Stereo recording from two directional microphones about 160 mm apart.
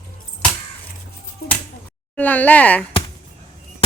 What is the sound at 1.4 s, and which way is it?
Finger snapping, 80° left.